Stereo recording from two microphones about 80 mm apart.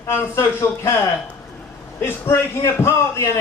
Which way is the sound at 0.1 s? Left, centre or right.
Left.